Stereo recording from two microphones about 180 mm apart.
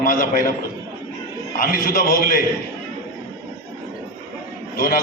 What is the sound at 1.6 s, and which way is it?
Speech, 55° left (ahead or behind).